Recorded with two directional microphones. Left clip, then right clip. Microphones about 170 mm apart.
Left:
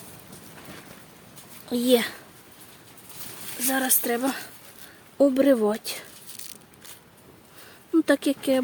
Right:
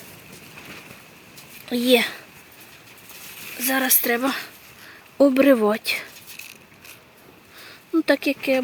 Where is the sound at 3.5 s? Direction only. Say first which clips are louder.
Right 4 dB; centre (ahead or behind).